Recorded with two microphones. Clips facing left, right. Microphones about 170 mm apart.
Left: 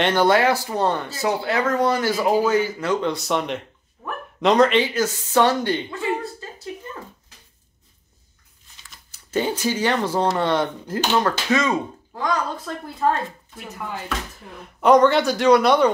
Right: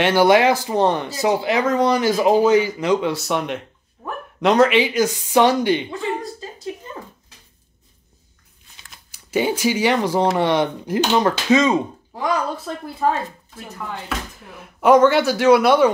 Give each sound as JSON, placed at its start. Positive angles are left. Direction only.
{"t": 0.0, "sound": "speech", "side_deg": -10}
{"t": 3.1, "sound": "speech", "side_deg": 0}
{"t": 9.1, "sound": "speech", "side_deg": -10}
{"t": 14.5, "sound": "speech", "side_deg": -5}